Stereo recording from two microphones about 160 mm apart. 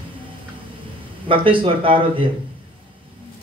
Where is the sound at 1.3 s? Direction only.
35° right (ahead or behind).